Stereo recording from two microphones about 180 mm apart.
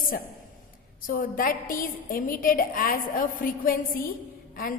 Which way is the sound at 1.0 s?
50° left (ahead or behind).